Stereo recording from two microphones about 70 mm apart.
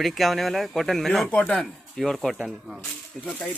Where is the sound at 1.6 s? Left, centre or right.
Centre.